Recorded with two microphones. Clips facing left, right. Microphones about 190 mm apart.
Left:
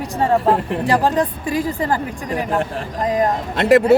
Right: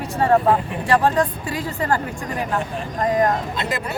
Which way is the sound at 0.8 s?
15° left (ahead or behind).